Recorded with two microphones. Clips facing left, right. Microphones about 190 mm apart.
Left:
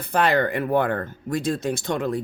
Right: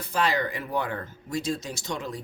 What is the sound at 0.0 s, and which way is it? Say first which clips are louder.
Speech: left 6 dB; 60° left (ahead or behind).